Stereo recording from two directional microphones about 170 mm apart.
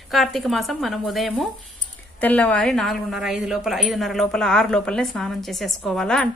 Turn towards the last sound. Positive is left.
turn(degrees=5)  # may be behind; listen again after turning